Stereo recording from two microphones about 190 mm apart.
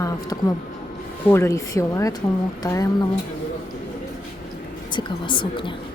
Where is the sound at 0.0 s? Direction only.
15° left (ahead or behind).